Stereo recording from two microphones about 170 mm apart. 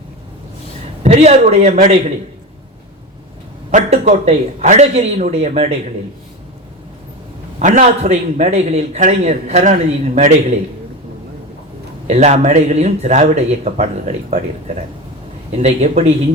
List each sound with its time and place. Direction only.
1.0 s speech: 40° right (ahead or behind)
3.7 s speech: 45° right (ahead or behind)
7.6 s a man's voice: 45° right (ahead or behind)
12.0 s speech: 40° right (ahead or behind)